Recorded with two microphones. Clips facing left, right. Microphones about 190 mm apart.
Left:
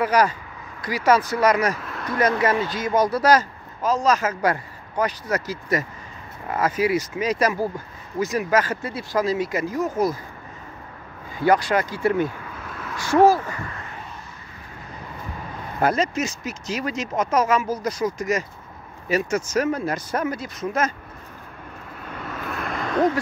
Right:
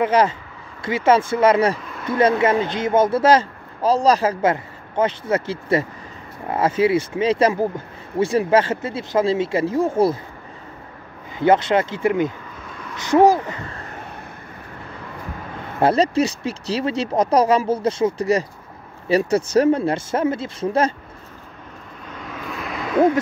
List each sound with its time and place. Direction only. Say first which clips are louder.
0.0 s speech: right 2 dB; 25° right (ahead or behind)
11.3 s speech: right 3 dB; 25° right (ahead or behind)
15.8 s speech: right 5 dB; 30° right (ahead or behind)
22.2 s vehicle: even; centre (ahead or behind)